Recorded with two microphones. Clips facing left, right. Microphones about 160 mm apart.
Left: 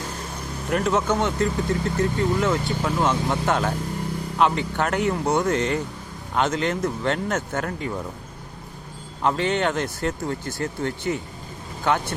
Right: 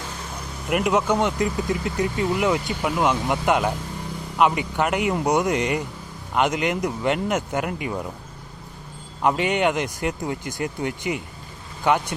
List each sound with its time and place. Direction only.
0.7 s speech: 15° right (ahead or behind)
9.2 s speech: 15° right (ahead or behind)